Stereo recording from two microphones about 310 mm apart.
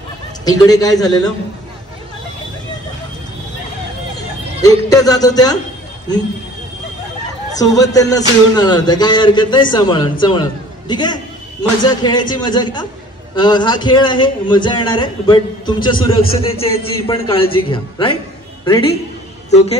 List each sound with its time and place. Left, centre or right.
0.5 s a man's voice: centre
4.6 s a man's voice: centre
7.5 s a man's voice: centre
19.5 s a woman's voice: centre